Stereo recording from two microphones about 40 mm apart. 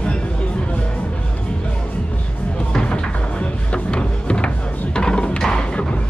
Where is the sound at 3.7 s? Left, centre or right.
Left.